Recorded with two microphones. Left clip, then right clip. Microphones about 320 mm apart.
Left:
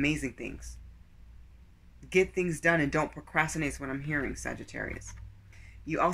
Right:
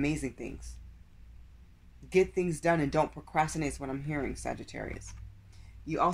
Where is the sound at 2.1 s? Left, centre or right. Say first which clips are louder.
Even; centre.